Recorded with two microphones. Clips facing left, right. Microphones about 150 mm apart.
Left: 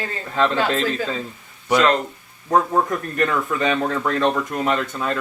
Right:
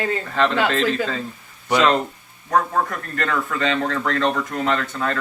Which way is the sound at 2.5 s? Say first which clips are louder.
Left 2 dB; 20° left (ahead or behind).